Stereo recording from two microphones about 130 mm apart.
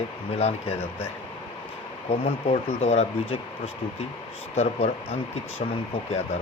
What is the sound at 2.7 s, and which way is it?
Speech, 55° left (ahead or behind).